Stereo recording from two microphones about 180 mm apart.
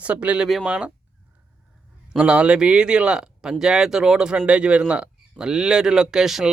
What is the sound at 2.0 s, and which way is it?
Speech, 5° right (ahead or behind).